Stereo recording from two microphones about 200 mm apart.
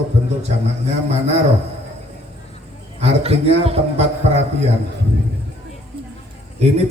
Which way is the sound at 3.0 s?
30° right (ahead or behind).